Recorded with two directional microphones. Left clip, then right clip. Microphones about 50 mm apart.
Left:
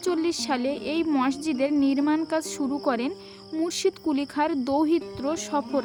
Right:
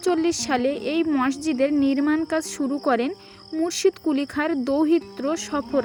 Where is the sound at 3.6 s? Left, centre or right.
Right.